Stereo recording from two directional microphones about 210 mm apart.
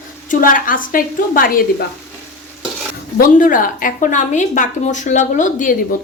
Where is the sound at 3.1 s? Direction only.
40° left (ahead or behind).